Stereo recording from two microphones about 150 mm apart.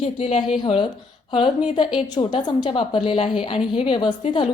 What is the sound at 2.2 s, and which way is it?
A woman's voice, 30° left (ahead or behind).